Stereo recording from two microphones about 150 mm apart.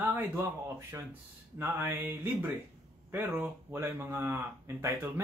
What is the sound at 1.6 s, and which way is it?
Speech, 15° right (ahead or behind).